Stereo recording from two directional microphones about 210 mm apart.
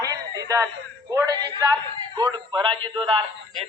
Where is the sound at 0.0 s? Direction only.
15° right (ahead or behind).